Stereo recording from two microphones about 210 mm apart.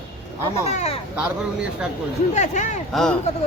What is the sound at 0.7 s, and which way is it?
Speech, 30° left (ahead or behind).